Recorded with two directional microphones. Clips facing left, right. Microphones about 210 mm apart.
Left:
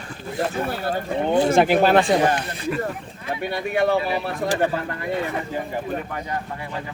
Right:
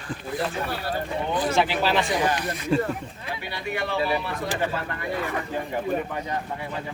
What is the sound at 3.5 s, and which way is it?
Speech, 50° left (ahead or behind).